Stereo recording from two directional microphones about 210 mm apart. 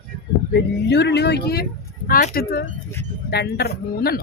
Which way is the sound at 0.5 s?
55° left (ahead or behind).